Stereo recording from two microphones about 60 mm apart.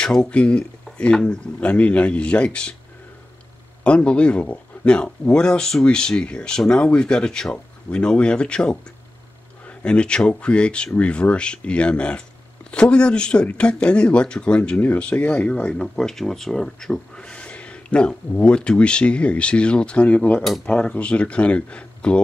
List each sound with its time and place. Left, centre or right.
0.0 s speech: centre
3.8 s speech: centre